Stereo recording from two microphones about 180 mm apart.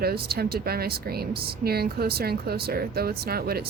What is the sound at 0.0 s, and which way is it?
A woman's voice, 60° right (ahead or behind).